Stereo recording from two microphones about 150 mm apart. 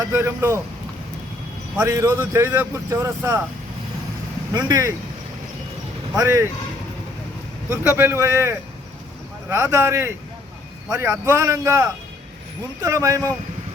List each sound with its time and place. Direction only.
0.0 s a man's voice: 15° right (ahead or behind)
1.7 s a man's voice: 20° right (ahead or behind)
4.5 s a man's voice: 25° right (ahead or behind)
6.1 s a man's voice: 20° right (ahead or behind)
7.7 s a man's voice: 15° right (ahead or behind)